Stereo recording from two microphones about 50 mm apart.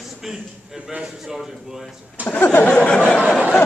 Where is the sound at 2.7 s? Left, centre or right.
Left.